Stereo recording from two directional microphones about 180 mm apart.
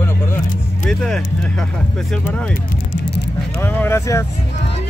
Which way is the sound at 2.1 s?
5° left (ahead or behind).